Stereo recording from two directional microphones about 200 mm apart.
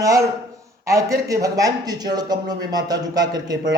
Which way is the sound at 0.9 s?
15° right (ahead or behind).